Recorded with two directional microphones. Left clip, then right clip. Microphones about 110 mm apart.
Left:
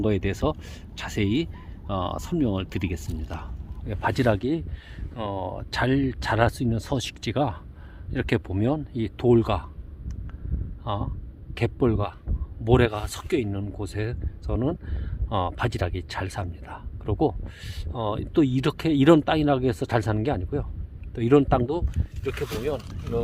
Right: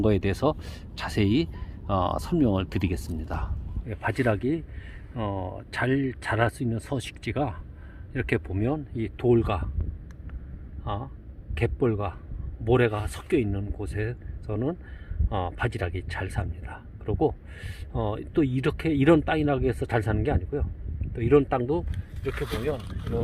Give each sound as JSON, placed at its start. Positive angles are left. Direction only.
{"t": 0.0, "sound": "speech", "side_deg": 5}
{"t": 3.8, "sound": "speech", "side_deg": 30}
{"t": 10.8, "sound": "speech", "side_deg": 30}
{"t": 21.2, "sound": "speech", "side_deg": 40}